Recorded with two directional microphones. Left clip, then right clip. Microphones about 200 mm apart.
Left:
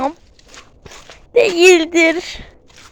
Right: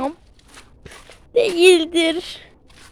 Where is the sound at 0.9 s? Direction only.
10° right (ahead or behind).